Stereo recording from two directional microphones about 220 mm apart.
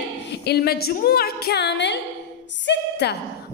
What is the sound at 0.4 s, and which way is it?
A woman's voice, 45° left (ahead or behind).